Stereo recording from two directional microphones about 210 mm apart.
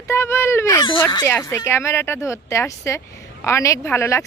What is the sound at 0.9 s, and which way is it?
Speech, 20° left (ahead or behind).